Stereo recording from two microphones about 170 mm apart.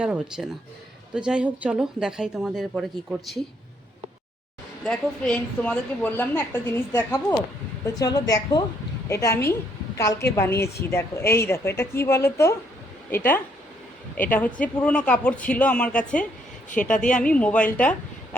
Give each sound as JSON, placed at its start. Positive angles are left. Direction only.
{"t": 0.0, "sound": "speech", "side_deg": -5}
{"t": 4.9, "sound": "a woman's voice", "side_deg": 5}